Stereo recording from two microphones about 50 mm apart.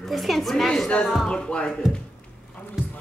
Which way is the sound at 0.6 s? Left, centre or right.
Centre.